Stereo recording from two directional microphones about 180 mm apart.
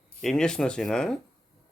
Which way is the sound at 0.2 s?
5° left (ahead or behind).